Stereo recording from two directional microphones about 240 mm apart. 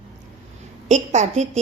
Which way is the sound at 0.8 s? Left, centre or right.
Right.